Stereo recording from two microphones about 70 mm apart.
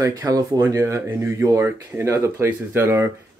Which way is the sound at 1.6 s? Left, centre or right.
Right.